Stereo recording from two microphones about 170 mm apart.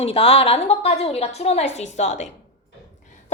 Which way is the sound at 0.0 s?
35° left (ahead or behind).